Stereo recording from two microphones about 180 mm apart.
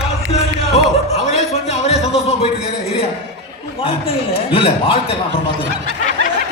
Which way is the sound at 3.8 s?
30° left (ahead or behind).